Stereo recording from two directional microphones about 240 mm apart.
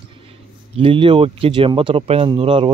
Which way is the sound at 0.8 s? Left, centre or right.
Right.